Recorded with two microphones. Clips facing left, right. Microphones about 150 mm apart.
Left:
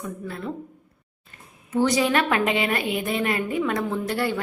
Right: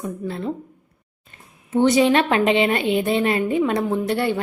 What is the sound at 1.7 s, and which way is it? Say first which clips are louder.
A woman's voice: right 5 dB; 25° right (ahead or behind).